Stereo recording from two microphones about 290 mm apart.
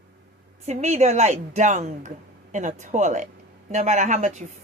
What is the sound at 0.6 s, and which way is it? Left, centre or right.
Speech, right.